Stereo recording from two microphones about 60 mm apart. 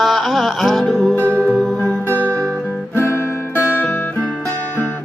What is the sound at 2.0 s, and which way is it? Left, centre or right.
Music, left.